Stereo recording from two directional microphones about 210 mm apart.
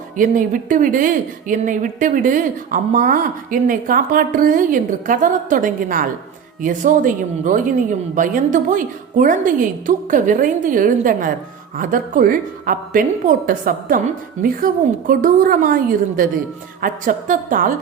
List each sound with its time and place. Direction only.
0.2 s a woman's voice: 40° right (ahead or behind)